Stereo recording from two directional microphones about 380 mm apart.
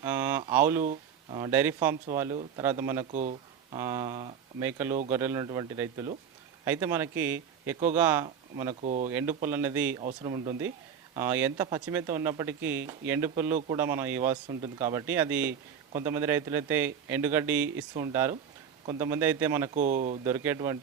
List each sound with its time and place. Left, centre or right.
0.0 s a sound: centre
0.8 s speech: centre
3.1 s speech: centre
3.8 s a man's voice: centre
8.8 s speech: centre
9.0 s a man's voice: centre
19.7 s speech: centre
20.2 s speech: centre